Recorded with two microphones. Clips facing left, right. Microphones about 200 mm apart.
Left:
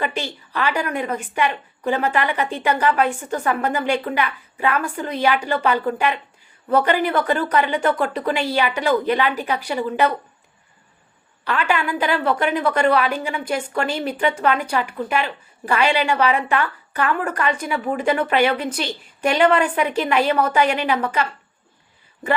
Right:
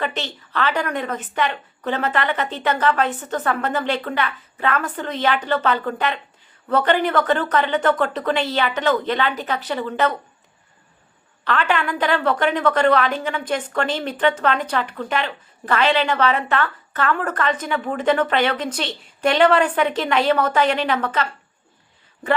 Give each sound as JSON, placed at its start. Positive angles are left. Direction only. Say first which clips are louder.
{"t": 0.0, "sound": "a woman's voice", "louder": "left 1 dB", "side_deg": 10}
{"t": 11.4, "sound": "a woman's voice", "louder": "even", "side_deg": 10}